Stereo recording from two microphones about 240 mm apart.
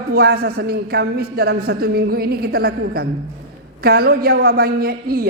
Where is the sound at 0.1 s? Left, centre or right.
Right.